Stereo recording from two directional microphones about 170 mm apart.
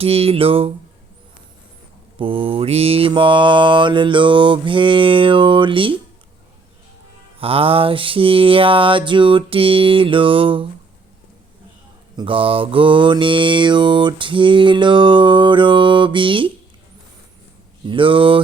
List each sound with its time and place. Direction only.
0.0 s mantra: 35° right (ahead or behind)
2.1 s mantra: 30° right (ahead or behind)
7.3 s mantra: 35° right (ahead or behind)
12.1 s mantra: 30° right (ahead or behind)
17.8 s mantra: 30° right (ahead or behind)